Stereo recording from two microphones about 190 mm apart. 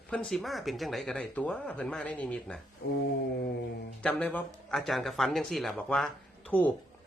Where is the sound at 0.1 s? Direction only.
5° left (ahead or behind).